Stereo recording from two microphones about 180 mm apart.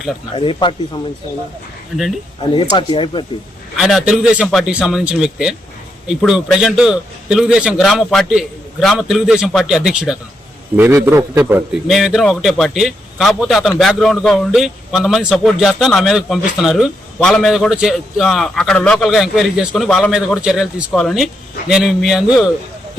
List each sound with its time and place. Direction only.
0.3 s speech: 30° left (ahead or behind)
2.4 s speech: 25° left (ahead or behind)
3.8 s a man's voice: centre (ahead or behind)
11.9 s a man's voice: centre (ahead or behind)